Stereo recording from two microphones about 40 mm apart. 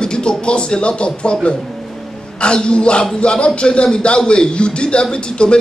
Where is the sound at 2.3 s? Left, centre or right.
Left.